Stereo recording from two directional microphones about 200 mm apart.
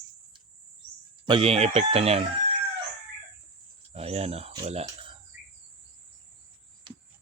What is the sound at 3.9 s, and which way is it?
Speech, 30° right (ahead or behind).